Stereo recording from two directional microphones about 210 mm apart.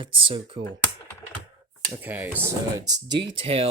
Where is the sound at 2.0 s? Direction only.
10° right (ahead or behind).